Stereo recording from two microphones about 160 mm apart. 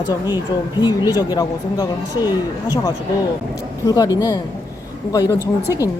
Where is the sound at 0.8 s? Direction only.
25° left (ahead or behind).